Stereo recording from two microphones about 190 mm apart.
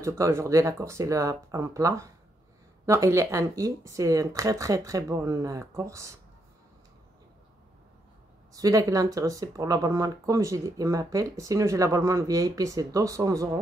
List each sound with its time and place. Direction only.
0.2 s speech: 15° right (ahead or behind)
8.5 s speech: 20° right (ahead or behind)